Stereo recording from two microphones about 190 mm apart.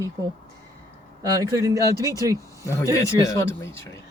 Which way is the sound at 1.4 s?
15° right (ahead or behind).